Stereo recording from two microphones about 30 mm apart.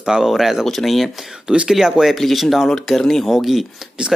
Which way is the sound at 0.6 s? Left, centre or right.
Centre.